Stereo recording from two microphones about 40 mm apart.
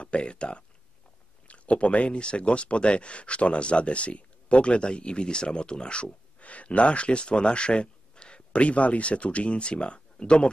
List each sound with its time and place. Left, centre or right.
0.0 s speech: left